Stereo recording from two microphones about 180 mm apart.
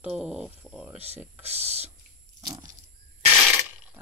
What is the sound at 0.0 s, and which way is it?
Speech, 5° right (ahead or behind).